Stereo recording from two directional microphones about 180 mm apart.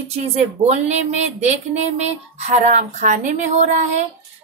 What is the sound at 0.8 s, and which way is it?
Speech, 40° right (ahead or behind).